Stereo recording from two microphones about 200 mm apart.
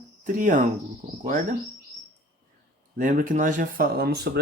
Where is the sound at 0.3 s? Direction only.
40° right (ahead or behind).